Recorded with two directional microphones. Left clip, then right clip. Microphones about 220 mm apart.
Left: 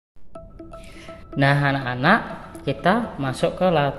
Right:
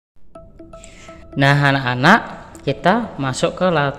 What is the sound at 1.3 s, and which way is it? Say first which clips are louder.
A woman's voice: right 5 dB; 15° right (ahead or behind).